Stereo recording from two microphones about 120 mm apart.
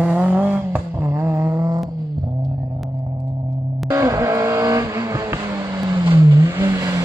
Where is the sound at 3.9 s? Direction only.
25° right (ahead or behind).